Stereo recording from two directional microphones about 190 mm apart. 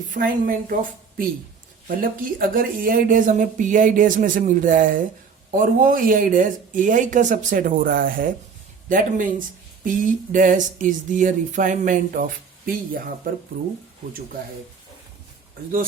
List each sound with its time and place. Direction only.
0.1 s speech: 45° right (ahead or behind)
2.0 s speech: 45° right (ahead or behind)